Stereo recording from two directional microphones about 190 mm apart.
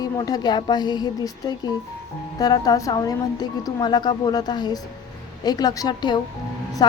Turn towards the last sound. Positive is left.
turn(degrees=20)  # may be behind; listen again after turning